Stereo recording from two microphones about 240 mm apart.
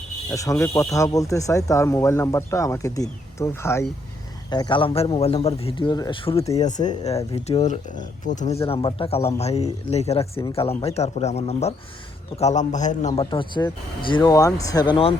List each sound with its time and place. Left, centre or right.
0.3 s speech: centre